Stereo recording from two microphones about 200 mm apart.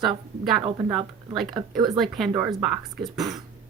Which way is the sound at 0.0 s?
Centre (ahead or behind).